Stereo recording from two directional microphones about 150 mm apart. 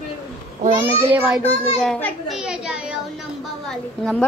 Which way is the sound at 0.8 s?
15° right (ahead or behind).